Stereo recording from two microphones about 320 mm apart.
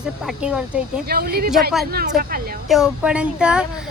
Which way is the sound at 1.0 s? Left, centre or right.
Right.